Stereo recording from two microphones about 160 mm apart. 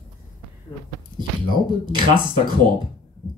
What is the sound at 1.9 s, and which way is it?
Speech, 30° right (ahead or behind).